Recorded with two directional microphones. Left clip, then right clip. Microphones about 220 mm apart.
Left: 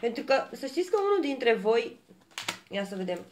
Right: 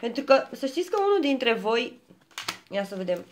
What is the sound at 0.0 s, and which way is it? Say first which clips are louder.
Speech: right 5 dB; 45° right (ahead or behind).